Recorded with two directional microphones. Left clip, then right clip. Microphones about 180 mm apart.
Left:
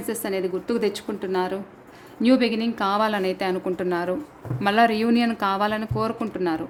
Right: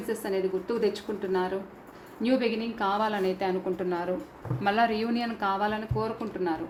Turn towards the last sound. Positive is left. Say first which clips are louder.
# left 5 dB
turn(degrees=65)  # may be behind; listen again after turning